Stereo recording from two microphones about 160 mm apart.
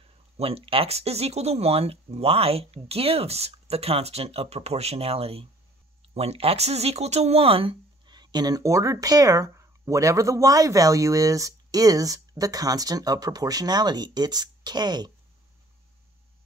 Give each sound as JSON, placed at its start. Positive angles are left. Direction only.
{"t": 0.4, "sound": "speech", "side_deg": -35}